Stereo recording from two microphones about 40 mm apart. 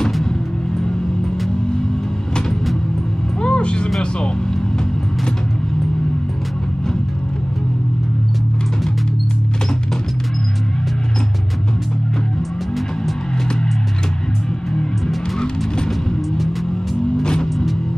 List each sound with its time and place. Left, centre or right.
3.4 s music: left
17.2 s vehicle: centre